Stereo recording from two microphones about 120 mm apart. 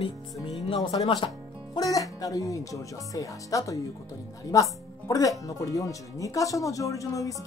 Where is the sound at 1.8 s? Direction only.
30° left (ahead or behind).